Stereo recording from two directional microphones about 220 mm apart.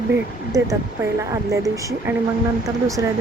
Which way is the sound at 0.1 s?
15° right (ahead or behind).